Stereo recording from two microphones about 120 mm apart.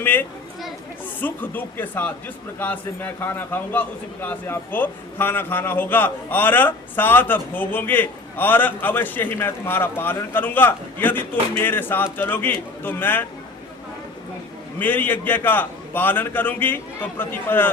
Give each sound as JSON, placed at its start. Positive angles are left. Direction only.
{"t": 0.0, "sound": "a man's voice", "side_deg": 15}
{"t": 14.8, "sound": "a man's voice", "side_deg": 15}